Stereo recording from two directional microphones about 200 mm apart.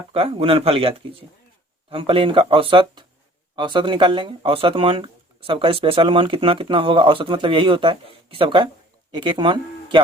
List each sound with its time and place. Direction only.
0.1 s speech: 30° right (ahead or behind)